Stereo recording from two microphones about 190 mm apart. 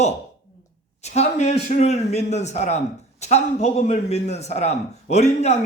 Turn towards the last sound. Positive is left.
turn(degrees=35)  # may be behind; listen again after turning